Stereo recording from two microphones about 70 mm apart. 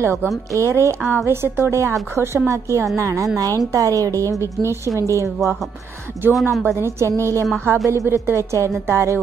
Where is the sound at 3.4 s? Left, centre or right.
Right.